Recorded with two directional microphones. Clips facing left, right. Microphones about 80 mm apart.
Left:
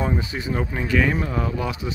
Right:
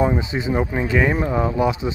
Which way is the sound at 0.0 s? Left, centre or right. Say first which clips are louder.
Right 5 dB; right.